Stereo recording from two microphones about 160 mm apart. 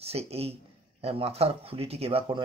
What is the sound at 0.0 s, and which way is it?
Speech, 40° right (ahead or behind).